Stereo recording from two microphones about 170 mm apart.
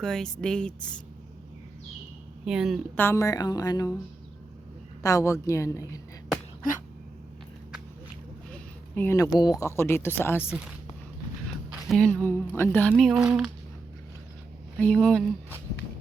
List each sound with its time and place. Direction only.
0.0 s speech: 5° left (ahead or behind)
2.4 s speech: 5° right (ahead or behind)
2.9 s a woman's voice: 15° left (ahead or behind)
5.0 s speech: 20° left (ahead or behind)
9.0 s speech: 15° left (ahead or behind)
11.7 s speech: centre (ahead or behind)
12.9 s speech: centre (ahead or behind)
14.8 s speech: 5° left (ahead or behind)